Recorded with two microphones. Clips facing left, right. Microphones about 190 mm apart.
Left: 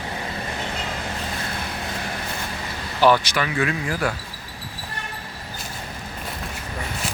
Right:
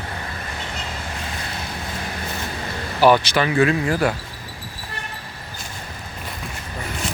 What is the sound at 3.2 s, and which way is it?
Speech, 30° right (ahead or behind).